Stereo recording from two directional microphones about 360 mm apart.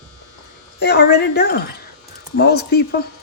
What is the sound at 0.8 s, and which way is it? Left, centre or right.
Speech, left.